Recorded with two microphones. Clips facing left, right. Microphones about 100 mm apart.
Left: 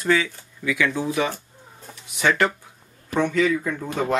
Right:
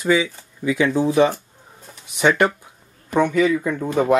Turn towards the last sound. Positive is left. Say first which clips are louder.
# right 6 dB
turn(degrees=-15)  # may be behind; listen again after turning